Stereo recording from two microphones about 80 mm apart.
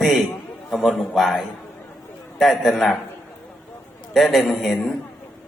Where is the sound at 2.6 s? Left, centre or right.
Centre.